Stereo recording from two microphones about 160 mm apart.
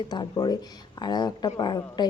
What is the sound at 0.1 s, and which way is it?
A woman's voice, 25° left (ahead or behind).